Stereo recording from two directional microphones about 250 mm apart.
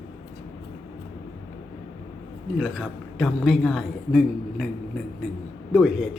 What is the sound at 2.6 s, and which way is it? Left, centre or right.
A man's voice, centre.